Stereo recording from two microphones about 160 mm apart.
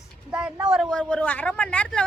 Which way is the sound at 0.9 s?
5° left (ahead or behind).